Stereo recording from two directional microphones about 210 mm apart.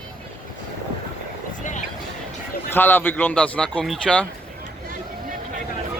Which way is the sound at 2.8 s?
10° left (ahead or behind).